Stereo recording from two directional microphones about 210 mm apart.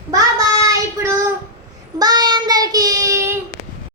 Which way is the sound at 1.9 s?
20° right (ahead or behind).